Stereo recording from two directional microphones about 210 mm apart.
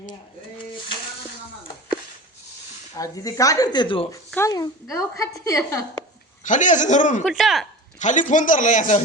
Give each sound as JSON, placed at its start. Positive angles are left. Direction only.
{"t": 2.9, "sound": "a woman's voice", "side_deg": 15}
{"t": 6.4, "sound": "a man's voice", "side_deg": 35}
{"t": 7.3, "sound": "speech", "side_deg": 0}
{"t": 7.9, "sound": "a man's voice", "side_deg": 35}